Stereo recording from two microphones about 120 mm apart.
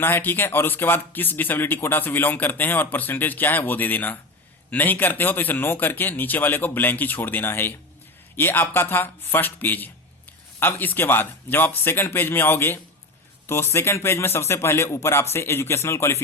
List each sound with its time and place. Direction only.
0.0 s speech: 15° left (ahead or behind)